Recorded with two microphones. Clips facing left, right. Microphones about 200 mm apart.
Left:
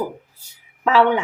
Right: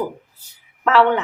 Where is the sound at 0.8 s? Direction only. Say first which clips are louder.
Even; 10° left (ahead or behind).